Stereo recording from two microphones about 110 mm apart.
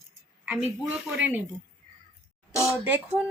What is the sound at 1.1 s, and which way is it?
Speech, 10° right (ahead or behind).